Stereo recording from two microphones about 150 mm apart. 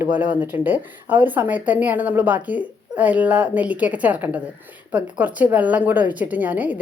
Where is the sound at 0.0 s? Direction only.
10° right (ahead or behind).